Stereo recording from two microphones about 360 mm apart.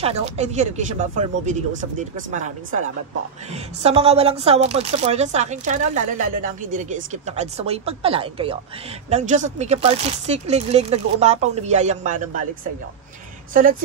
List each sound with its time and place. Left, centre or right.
0.0 s speech: centre
13.5 s speech: right